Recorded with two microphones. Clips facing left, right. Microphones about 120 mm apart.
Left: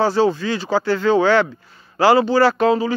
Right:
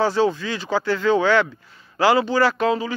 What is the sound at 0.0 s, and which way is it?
Speech, 30° left (ahead or behind).